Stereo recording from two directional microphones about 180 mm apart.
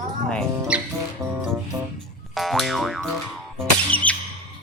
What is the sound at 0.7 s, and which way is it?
Music, 5° right (ahead or behind).